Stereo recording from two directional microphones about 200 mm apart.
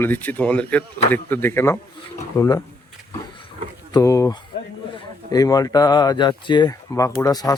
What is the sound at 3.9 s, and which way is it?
Speech, 15° left (ahead or behind).